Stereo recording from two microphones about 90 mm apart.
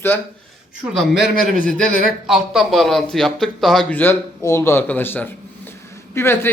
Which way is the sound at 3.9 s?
20° left (ahead or behind).